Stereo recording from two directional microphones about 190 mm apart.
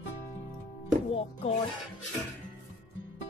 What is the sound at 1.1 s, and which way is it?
Music, 30° left (ahead or behind).